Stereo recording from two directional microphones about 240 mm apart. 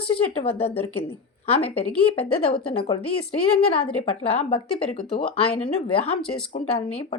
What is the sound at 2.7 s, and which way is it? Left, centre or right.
A woman's voice, left.